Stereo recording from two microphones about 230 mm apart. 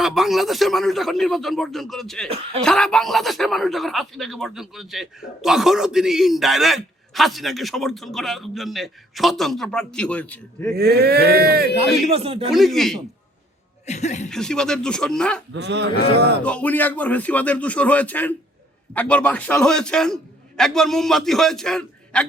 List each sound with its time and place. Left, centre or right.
0.0 s a man's voice: centre
10.8 s speech: right
12.0 s speech: right
12.5 s a man's voice: centre
13.8 s speech: left
14.3 s a man's voice: centre
15.5 s speech: right
16.4 s a man's voice: centre